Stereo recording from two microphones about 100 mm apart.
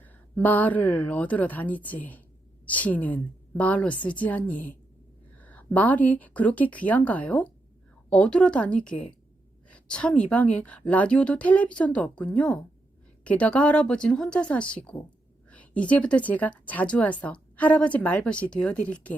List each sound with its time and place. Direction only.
0.0 s a woman's voice: 15° left (ahead or behind)